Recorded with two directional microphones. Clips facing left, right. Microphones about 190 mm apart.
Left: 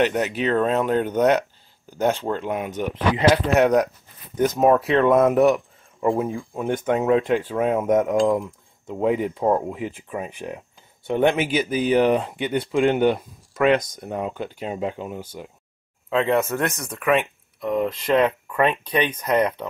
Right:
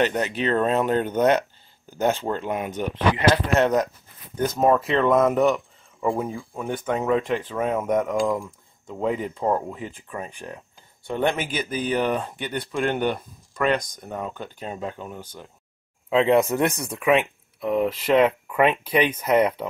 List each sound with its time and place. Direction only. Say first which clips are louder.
0.0 s speech: left 2 dB; 5° left (ahead or behind)
3.2 s speech: left 4 dB; 15° left (ahead or behind)
16.1 s speech: right 2 dB; 15° right (ahead or behind)